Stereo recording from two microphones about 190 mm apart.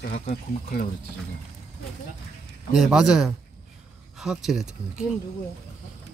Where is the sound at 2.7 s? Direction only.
Centre (ahead or behind).